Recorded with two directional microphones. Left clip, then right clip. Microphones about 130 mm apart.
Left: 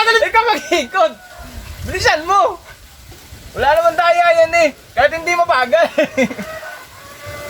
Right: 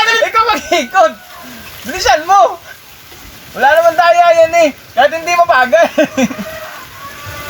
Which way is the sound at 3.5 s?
25° left (ahead or behind).